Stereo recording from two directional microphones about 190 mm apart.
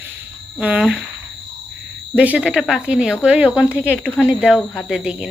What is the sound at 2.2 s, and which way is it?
Speech, 5° right (ahead or behind).